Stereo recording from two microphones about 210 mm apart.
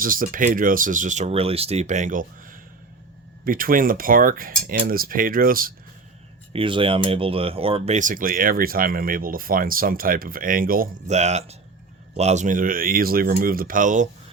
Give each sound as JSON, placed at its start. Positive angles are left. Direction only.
{"t": 0.0, "sound": "speech", "side_deg": -40}
{"t": 6.5, "sound": "speech", "side_deg": -25}